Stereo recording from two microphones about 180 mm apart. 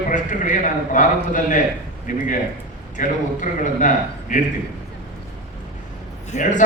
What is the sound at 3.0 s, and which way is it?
A man's voice, 45° left (ahead or behind).